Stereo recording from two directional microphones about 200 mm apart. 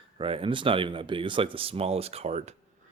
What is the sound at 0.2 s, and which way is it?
A man's voice, 25° right (ahead or behind).